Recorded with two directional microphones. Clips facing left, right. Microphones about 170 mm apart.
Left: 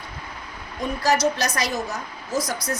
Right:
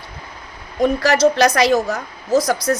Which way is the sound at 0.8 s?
75° right (ahead or behind).